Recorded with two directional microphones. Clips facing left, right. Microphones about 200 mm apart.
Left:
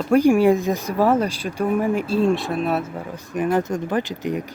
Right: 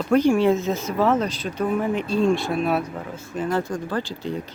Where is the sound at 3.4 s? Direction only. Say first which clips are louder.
Left 4 dB; 15° left (ahead or behind).